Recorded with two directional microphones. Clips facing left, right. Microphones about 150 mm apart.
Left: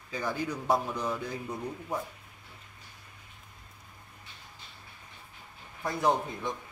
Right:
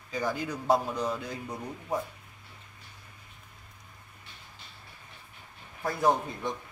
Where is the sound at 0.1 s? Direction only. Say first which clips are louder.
Right 1 dB; 20° right (ahead or behind).